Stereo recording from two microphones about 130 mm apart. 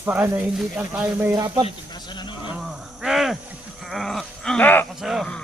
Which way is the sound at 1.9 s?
35° left (ahead or behind).